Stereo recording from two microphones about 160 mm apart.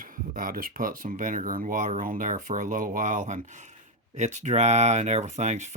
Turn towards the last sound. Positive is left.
turn(degrees=-45)  # may be behind; listen again after turning